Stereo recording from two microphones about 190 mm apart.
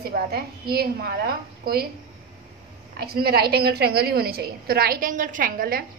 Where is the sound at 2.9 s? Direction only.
55° right (ahead or behind).